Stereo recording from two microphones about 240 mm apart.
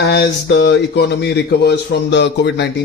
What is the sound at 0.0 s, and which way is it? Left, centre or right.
Speech, left.